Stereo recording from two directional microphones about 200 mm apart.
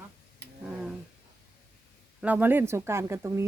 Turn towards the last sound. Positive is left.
turn(degrees=-15)  # may be behind; listen again after turning